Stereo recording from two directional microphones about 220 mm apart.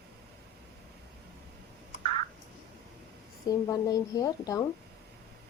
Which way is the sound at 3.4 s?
15° left (ahead or behind).